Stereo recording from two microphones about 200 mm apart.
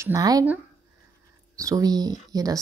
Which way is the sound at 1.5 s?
15° right (ahead or behind).